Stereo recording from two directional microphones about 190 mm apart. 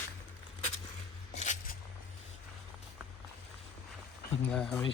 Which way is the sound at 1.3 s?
40° left (ahead or behind).